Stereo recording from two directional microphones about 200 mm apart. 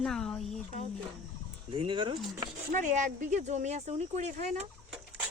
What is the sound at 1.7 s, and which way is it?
Speech, 25° right (ahead or behind).